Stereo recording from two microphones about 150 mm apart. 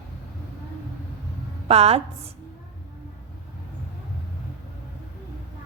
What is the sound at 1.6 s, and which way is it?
Speech, 40° right (ahead or behind).